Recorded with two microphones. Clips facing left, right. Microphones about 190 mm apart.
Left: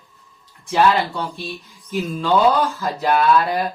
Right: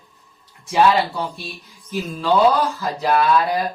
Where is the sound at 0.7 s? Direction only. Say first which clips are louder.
Right 1 dB; centre (ahead or behind).